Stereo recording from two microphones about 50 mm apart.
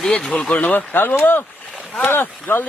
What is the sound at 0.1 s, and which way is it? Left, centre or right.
Speech, centre.